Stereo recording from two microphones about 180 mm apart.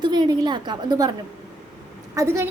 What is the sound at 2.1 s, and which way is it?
Speech, 15° right (ahead or behind).